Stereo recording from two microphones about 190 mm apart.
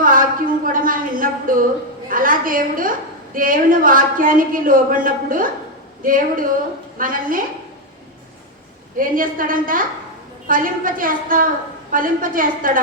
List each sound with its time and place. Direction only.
0.0 s a sound: 45° right (ahead or behind)
2.0 s a woman's voice: 45° right (ahead or behind)
9.0 s a woman's voice: 45° right (ahead or behind)